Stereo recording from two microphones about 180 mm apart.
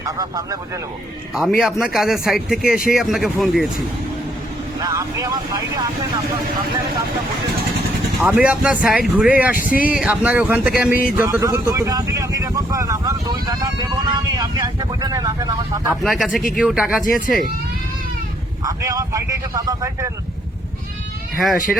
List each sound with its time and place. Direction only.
0.0 s speech: 20° right (ahead or behind)
1.3 s speech: centre (ahead or behind)
2.6 s speech: 50° left (ahead or behind)
2.9 s speech: centre (ahead or behind)
4.8 s speech: 20° right (ahead or behind)
8.2 s speech: 10° right (ahead or behind)
9.6 s speech: 50° left (ahead or behind)
9.9 s speech: 5° right (ahead or behind)
16.0 s speech: centre (ahead or behind)
17.0 s speech: 45° left (ahead or behind)
18.6 s speech: 20° right (ahead or behind)
21.4 s speech: centre (ahead or behind)